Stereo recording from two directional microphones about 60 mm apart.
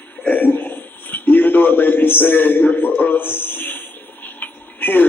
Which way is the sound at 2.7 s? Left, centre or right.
Left.